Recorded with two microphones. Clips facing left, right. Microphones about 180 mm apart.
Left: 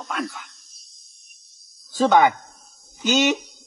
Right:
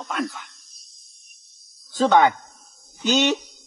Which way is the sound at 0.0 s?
Centre (ahead or behind).